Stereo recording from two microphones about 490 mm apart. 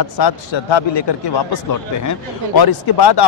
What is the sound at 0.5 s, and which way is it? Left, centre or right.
A man's voice, left.